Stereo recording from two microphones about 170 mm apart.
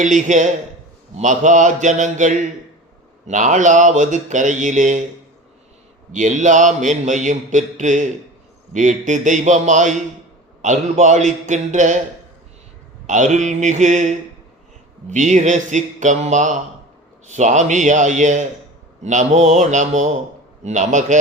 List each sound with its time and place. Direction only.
0.0 s a man's voice: 45° right (ahead or behind)
6.1 s a man's voice: 45° right (ahead or behind)
13.1 s a man's voice: 45° right (ahead or behind)
15.1 s a man's voice: 45° right (ahead or behind)